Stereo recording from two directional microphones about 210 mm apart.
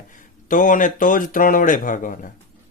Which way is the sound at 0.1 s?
40° left (ahead or behind).